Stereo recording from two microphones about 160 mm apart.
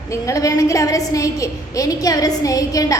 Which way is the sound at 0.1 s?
20° left (ahead or behind).